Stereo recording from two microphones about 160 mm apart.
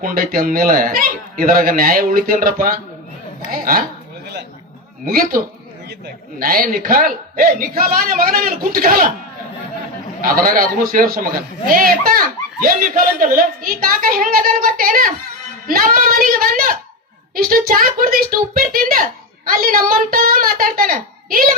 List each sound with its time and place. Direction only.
0.0 s speech: 60° right (ahead or behind)
5.0 s speech: 65° right (ahead or behind)
6.4 s speech: 60° right (ahead or behind)
10.2 s speech: 60° right (ahead or behind)